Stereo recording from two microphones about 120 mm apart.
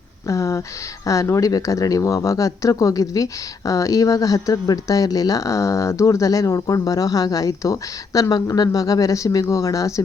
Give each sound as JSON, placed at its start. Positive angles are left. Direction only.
{"t": 0.3, "sound": "speech", "side_deg": 25}